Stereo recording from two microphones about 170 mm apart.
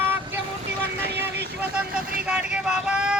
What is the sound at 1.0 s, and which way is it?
Vehicle, 75° right (ahead or behind).